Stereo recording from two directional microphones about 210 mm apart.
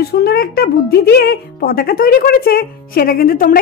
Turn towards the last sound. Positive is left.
turn(degrees=45)  # may be behind; listen again after turning